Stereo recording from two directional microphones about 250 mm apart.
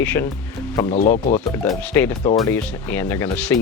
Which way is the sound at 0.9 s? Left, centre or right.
Left.